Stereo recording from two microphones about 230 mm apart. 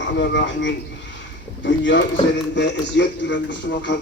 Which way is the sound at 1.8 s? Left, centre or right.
Left.